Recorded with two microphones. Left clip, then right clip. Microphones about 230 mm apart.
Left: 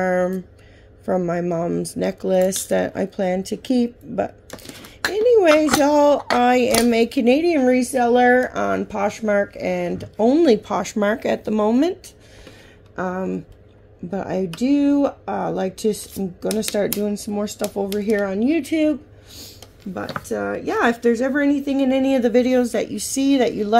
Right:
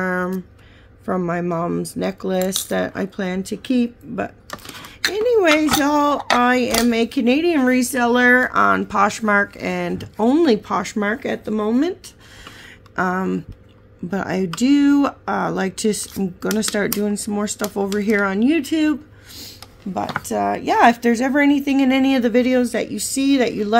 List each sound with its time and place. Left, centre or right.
0.0 s a sound: centre
1.0 s speech: centre
5.1 s a sound: centre
5.6 s speech: centre
7.5 s speech: centre
12.9 s a woman's voice: right; by 23.8 s centre